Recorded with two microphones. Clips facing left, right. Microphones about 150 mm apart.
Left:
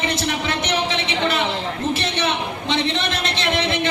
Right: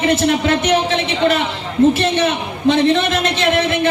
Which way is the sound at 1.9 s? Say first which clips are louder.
Right 6 dB; 55° right (ahead or behind).